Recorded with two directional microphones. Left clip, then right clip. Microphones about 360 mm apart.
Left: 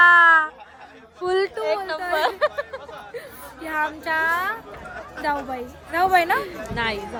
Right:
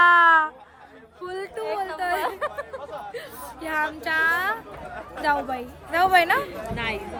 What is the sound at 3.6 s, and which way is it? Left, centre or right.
A woman's voice, centre.